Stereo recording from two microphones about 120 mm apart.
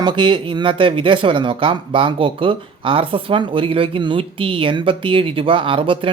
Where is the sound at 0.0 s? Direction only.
40° right (ahead or behind).